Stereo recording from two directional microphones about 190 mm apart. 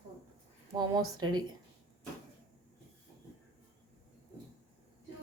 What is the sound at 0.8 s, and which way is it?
Speech, 20° right (ahead or behind).